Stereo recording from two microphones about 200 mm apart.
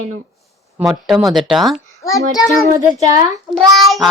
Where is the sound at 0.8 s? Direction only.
Centre (ahead or behind).